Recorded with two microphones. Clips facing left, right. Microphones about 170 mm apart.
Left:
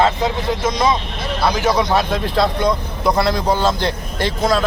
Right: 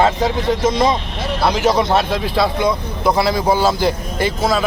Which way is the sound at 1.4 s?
5° right (ahead or behind).